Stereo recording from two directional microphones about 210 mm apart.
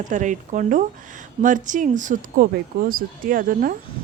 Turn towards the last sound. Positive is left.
turn(degrees=-40)  # may be behind; listen again after turning